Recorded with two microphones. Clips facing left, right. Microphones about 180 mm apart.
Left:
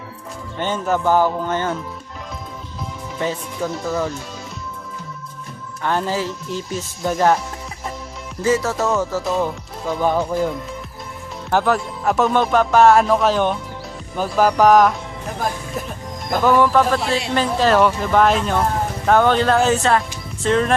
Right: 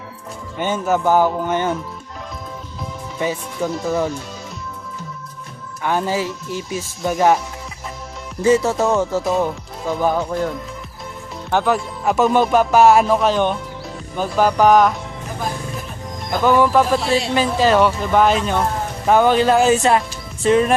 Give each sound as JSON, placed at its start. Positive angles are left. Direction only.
{"t": 0.6, "sound": "speech", "side_deg": -10}
{"t": 3.2, "sound": "speech", "side_deg": -10}
{"t": 5.8, "sound": "speech", "side_deg": -10}
{"t": 6.7, "sound": "speech", "side_deg": 0}
{"t": 8.4, "sound": "music", "side_deg": -20}
{"t": 9.2, "sound": "speech", "side_deg": -5}
{"t": 11.5, "sound": "speech", "side_deg": 0}
{"t": 16.4, "sound": "speech", "side_deg": -5}